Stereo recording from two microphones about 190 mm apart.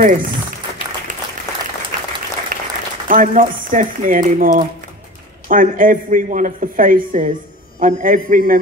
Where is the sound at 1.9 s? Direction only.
45° right (ahead or behind).